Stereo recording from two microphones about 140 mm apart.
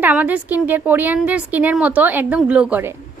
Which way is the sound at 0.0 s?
10° right (ahead or behind).